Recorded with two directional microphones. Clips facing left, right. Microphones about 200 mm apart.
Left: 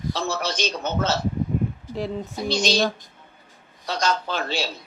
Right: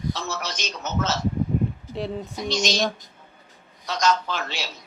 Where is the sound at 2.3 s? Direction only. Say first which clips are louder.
Left 4 dB; 30° left (ahead or behind).